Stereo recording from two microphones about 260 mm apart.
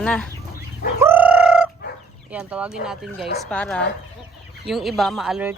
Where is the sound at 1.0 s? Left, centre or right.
Centre.